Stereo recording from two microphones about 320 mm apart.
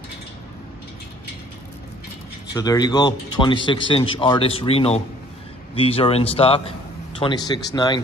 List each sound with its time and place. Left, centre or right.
2.5 s speech: centre